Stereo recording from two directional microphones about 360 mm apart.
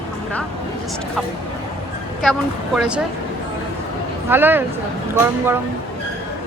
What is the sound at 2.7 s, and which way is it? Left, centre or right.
Speech, centre.